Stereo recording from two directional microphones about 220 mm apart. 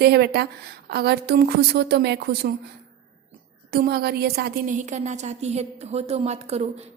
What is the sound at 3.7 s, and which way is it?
A woman's voice, 45° right (ahead or behind).